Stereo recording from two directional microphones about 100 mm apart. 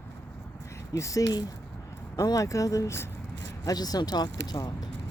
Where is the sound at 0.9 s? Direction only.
35° left (ahead or behind).